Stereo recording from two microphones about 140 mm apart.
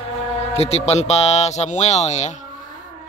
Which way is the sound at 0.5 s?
45° left (ahead or behind).